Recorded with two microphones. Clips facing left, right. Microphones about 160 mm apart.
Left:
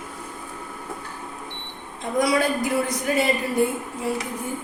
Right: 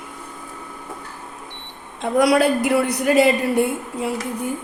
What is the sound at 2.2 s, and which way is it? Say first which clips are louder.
A man's voice: right 5 dB; 70° right (ahead or behind).